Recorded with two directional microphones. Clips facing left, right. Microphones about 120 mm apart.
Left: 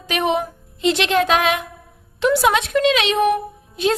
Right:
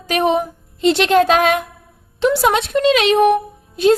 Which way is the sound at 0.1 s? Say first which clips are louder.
Right 4 dB; 40° right (ahead or behind).